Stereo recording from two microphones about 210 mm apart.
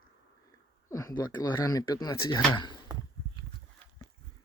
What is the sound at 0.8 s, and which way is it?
Speech, 15° left (ahead or behind).